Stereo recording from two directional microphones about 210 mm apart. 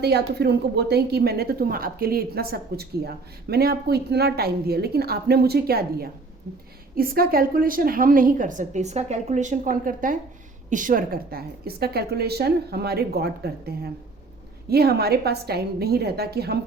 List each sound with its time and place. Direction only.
0.0 s a woman's voice: 50° right (ahead or behind)